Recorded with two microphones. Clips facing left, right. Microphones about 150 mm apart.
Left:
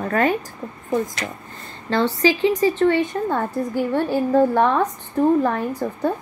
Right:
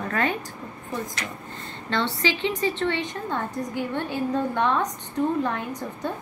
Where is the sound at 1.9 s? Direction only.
40° left (ahead or behind).